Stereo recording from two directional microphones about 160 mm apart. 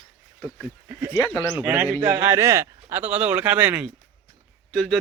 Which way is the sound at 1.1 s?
15° left (ahead or behind).